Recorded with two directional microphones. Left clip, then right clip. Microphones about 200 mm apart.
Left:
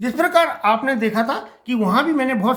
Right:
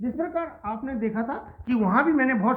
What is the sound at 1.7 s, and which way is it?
Speech, 20° left (ahead or behind).